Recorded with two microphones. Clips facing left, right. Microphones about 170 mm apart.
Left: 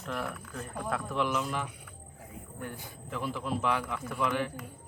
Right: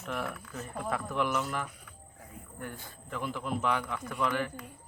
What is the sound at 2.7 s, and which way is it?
Speech, 15° left (ahead or behind).